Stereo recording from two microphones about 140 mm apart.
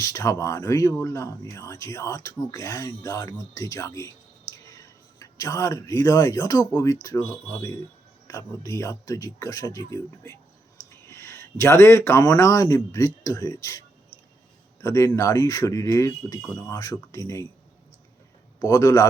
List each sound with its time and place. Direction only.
0.0 s speech: 20° left (ahead or behind)
18.6 s speech: 25° left (ahead or behind)